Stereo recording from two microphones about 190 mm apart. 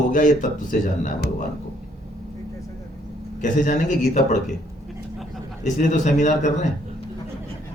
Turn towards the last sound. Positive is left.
turn(degrees=40)  # may be behind; listen again after turning